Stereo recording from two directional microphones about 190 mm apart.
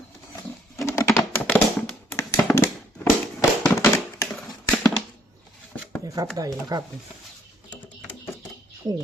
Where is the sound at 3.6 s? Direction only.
10° left (ahead or behind).